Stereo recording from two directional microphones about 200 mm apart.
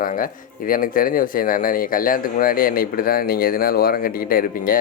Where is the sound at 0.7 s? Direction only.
45° left (ahead or behind).